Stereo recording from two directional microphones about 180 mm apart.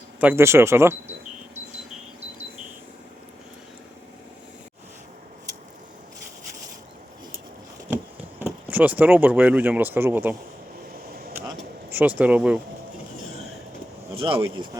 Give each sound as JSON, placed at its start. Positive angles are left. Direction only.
{"t": 0.2, "sound": "speech", "side_deg": -10}
{"t": 8.4, "sound": "speech", "side_deg": -10}
{"t": 11.9, "sound": "speech", "side_deg": -10}
{"t": 14.2, "sound": "speech", "side_deg": -30}